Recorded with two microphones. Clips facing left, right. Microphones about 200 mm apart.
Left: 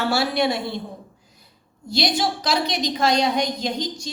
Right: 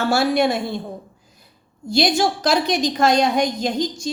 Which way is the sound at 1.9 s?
50° right (ahead or behind).